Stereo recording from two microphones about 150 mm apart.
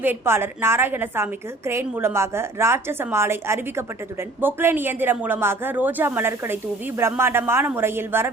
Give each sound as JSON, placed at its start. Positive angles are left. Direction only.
{"t": 0.0, "sound": "a woman's voice", "side_deg": -15}